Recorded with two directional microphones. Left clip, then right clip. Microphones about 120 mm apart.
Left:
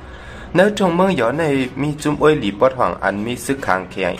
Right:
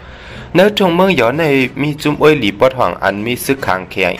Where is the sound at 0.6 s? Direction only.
20° right (ahead or behind).